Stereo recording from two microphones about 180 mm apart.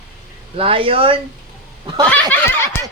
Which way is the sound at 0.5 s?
30° right (ahead or behind).